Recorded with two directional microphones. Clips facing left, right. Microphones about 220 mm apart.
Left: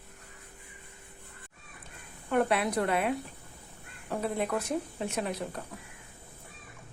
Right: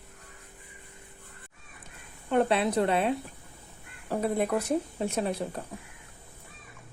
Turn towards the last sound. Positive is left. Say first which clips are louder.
# right 3 dB
turn(degrees=-30)  # may be behind; listen again after turning